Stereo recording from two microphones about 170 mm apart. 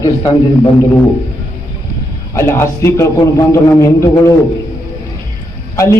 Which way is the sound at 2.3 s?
15° left (ahead or behind).